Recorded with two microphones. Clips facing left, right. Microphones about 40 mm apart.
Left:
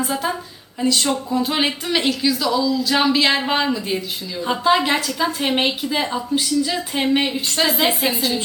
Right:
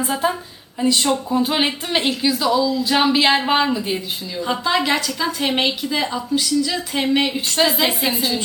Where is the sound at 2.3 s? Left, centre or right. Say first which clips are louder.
Right 3 dB; right.